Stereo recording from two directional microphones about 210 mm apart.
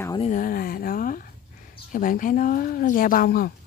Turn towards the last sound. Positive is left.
turn(degrees=45)  # may be behind; listen again after turning